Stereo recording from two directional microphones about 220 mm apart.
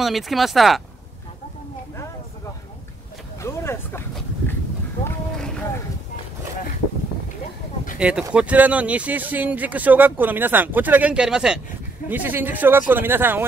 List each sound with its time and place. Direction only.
0.0 s speech: centre (ahead or behind)
3.3 s a sound: 10° left (ahead or behind)
8.0 s speech: 5° right (ahead or behind)